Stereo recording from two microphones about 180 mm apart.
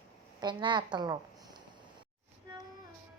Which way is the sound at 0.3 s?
25° right (ahead or behind).